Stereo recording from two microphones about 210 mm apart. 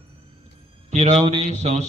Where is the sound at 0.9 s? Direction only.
30° right (ahead or behind).